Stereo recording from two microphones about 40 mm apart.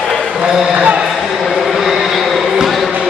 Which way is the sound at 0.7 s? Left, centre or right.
Right.